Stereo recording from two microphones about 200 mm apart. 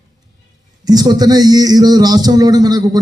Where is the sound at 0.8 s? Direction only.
20° right (ahead or behind).